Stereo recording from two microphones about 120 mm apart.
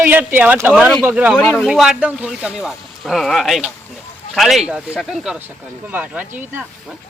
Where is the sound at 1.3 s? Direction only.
5° left (ahead or behind).